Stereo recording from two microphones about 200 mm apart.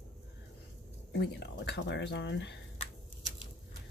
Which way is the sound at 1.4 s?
60° left (ahead or behind).